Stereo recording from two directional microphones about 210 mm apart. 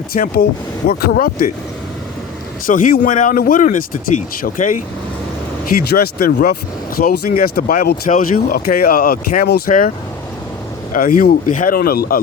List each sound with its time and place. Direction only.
0.1 s speech: 45° left (ahead or behind)
2.6 s speech: 40° left (ahead or behind)
5.9 s speech: 45° left (ahead or behind)
10.9 s speech: 40° left (ahead or behind)